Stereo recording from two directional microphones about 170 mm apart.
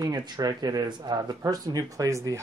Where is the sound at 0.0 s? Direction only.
25° right (ahead or behind).